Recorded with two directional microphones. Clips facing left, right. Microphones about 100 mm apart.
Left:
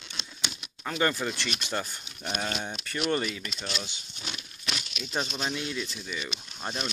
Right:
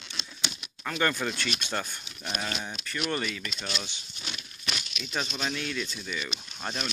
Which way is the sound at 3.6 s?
5° left (ahead or behind).